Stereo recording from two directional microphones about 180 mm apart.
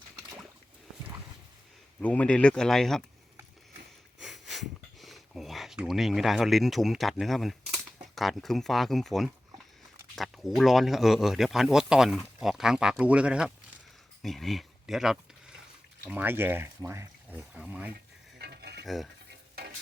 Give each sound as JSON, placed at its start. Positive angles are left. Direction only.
{"t": 2.0, "sound": "speech", "side_deg": 10}
{"t": 4.2, "sound": "a sound", "side_deg": 0}
{"t": 10.2, "sound": "speech", "side_deg": 0}
{"t": 18.3, "sound": "cutlery", "side_deg": -70}